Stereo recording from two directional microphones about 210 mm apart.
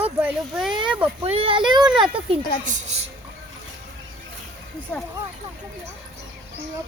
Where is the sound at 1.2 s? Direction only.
30° right (ahead or behind).